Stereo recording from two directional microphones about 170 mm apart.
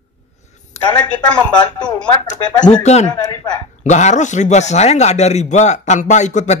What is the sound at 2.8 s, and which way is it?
A man's voice, 40° left (ahead or behind).